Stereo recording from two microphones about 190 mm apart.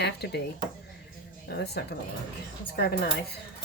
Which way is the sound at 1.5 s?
60° left (ahead or behind).